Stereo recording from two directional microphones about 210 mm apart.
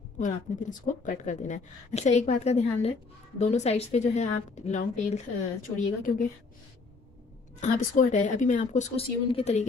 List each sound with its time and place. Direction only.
0.2 s a woman's voice: 35° left (ahead or behind)
7.6 s a woman's voice: 35° left (ahead or behind)